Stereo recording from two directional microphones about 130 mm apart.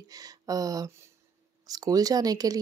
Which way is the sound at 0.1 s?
30° right (ahead or behind).